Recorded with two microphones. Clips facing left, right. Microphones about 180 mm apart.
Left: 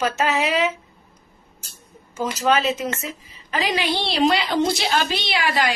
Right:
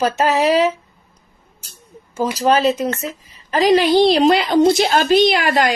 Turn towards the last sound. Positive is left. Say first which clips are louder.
# right 7 dB
turn(degrees=-45)  # may be behind; listen again after turning